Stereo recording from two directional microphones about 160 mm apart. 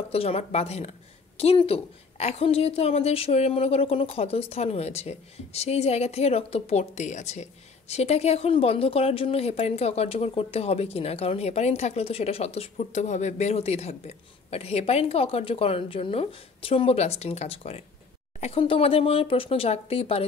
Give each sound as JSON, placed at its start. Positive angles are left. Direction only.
{"t": 0.1, "sound": "a woman's voice", "side_deg": 40}